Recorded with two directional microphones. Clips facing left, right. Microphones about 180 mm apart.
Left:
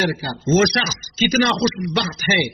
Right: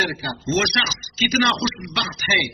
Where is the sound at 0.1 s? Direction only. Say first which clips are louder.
Left 4 dB; 50° left (ahead or behind).